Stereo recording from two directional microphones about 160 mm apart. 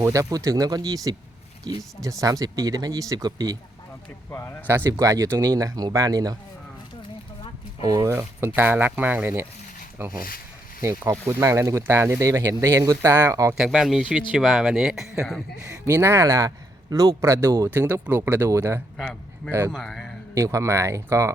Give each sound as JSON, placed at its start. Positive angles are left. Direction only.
{"t": 0.0, "sound": "speech", "side_deg": -20}
{"t": 4.3, "sound": "speech", "side_deg": 15}
{"t": 4.6, "sound": "speech", "side_deg": -15}
{"t": 7.8, "sound": "speech", "side_deg": -20}
{"t": 13.6, "sound": "speech", "side_deg": -5}
{"t": 15.9, "sound": "speech", "side_deg": -15}
{"t": 19.7, "sound": "speech", "side_deg": 0}
{"t": 20.3, "sound": "speech", "side_deg": -20}